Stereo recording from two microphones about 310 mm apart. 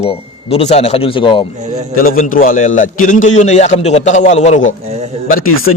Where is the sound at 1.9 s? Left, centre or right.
Left.